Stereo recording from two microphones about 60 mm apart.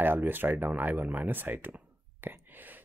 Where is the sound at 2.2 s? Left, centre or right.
Right.